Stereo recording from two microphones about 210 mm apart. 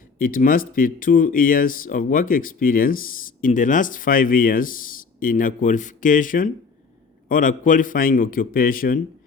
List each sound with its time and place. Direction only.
0.2 s speech: 40° left (ahead or behind)